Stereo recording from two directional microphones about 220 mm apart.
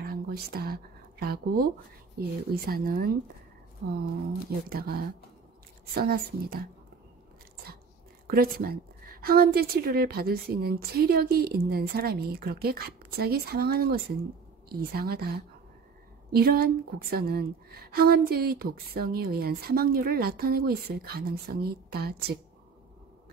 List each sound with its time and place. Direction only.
0.0 s whispering: 45° right (ahead or behind)
1.2 s a woman's voice: 45° right (ahead or behind)
8.3 s a woman's voice: 45° right (ahead or behind)